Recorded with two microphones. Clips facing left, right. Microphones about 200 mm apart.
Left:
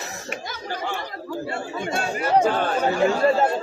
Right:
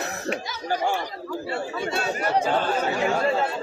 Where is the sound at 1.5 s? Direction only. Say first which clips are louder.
Right 1 dB; 50° left (ahead or behind).